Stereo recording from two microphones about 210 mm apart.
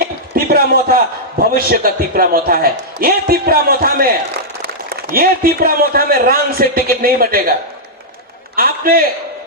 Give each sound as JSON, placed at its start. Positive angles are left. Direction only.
{"t": 0.3, "sound": "a man's voice", "side_deg": -45}
{"t": 8.5, "sound": "a man's voice", "side_deg": -45}